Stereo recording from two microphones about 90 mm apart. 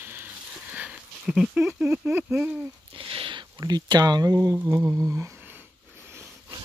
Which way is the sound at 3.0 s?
75° right (ahead or behind).